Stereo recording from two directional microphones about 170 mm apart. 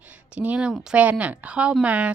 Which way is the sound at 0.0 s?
10° right (ahead or behind).